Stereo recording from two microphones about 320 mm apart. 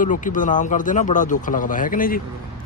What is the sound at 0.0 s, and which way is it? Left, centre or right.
Speech, left.